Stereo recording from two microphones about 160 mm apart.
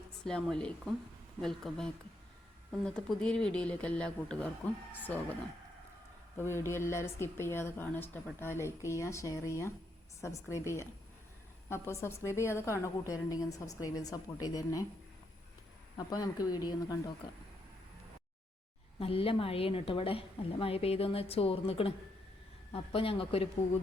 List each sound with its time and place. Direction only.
0.3 s speech: 5° left (ahead or behind)
6.3 s a woman's voice: 15° left (ahead or behind)
16.0 s a woman's voice: 25° left (ahead or behind)
18.9 s a woman's voice: 35° left (ahead or behind)